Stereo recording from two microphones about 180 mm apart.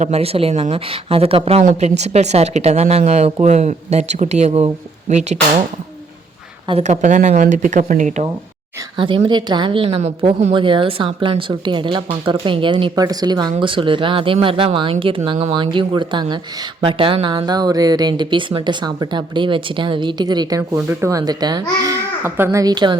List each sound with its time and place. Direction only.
0.0 s speech: 35° right (ahead or behind)
6.7 s speech: 40° right (ahead or behind)
9.0 s speech: 30° right (ahead or behind)
20.6 s speech: 10° right (ahead or behind)